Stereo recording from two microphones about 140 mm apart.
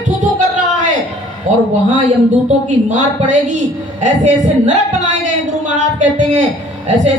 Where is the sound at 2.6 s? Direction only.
60° right (ahead or behind).